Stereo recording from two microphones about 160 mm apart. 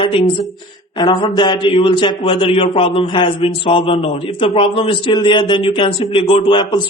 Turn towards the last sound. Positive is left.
turn(degrees=30)  # may be behind; listen again after turning